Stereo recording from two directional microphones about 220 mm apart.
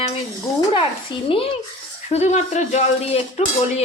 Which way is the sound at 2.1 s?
30° left (ahead or behind).